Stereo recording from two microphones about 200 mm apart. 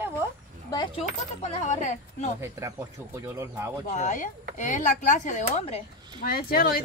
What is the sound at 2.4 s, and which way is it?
Speech, 15° right (ahead or behind).